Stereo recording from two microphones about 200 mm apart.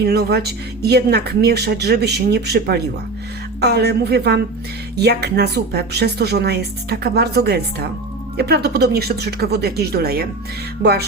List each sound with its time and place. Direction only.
0.0 s speech: 50° right (ahead or behind)